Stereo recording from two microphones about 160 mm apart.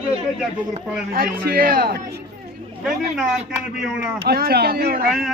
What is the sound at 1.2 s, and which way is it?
Speech, 70° right (ahead or behind).